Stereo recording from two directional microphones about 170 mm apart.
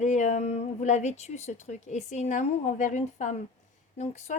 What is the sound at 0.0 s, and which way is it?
A woman's voice, 45° left (ahead or behind).